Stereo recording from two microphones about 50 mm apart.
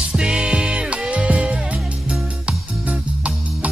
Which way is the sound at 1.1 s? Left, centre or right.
Right.